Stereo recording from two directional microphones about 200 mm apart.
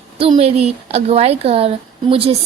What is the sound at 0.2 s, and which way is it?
Speech, 30° right (ahead or behind).